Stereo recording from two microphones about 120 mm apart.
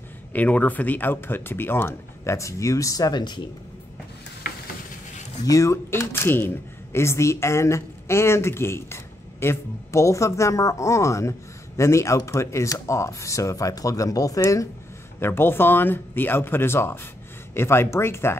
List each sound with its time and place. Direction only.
0.3 s speech: 15° left (ahead or behind); by 3.4 s 35° left (ahead or behind)
5.4 s speech: 25° left (ahead or behind)